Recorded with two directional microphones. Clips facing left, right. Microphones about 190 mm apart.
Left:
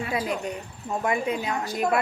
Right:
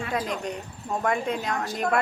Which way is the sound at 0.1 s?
10° left (ahead or behind).